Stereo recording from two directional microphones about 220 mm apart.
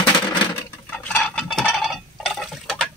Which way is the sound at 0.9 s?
5° left (ahead or behind).